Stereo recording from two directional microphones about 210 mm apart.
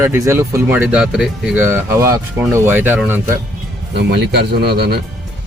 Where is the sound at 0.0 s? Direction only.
10° right (ahead or behind).